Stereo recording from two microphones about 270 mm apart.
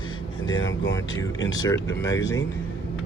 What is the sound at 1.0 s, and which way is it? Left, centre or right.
Speech, centre.